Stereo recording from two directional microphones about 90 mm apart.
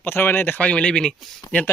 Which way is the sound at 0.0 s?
25° left (ahead or behind).